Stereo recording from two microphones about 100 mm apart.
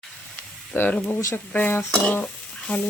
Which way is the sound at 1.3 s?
20° left (ahead or behind).